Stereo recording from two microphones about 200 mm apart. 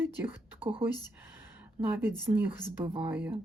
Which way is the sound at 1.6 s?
10° right (ahead or behind).